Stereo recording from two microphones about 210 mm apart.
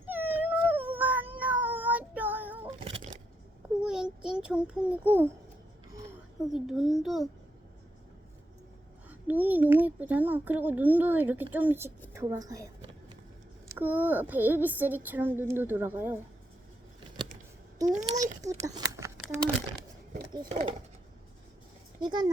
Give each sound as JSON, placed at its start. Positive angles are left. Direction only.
{"t": 0.1, "sound": "cat", "side_deg": -10}
{"t": 2.8, "sound": "a sound", "side_deg": -30}
{"t": 3.8, "sound": "a sound", "side_deg": -5}
{"t": 6.5, "sound": "a child's voice", "side_deg": 0}
{"t": 9.0, "sound": "speech", "side_deg": -10}
{"t": 13.7, "sound": "speech", "side_deg": -10}
{"t": 17.8, "sound": "a child's voice", "side_deg": -35}
{"t": 18.6, "sound": "a sound", "side_deg": -15}
{"t": 20.5, "sound": "speech", "side_deg": -25}
{"t": 22.0, "sound": "speech", "side_deg": -20}